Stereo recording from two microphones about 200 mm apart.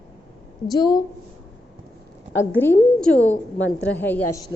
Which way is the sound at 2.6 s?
10° left (ahead or behind).